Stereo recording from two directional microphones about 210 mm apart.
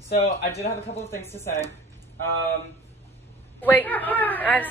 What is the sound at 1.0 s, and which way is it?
Speech, 10° left (ahead or behind).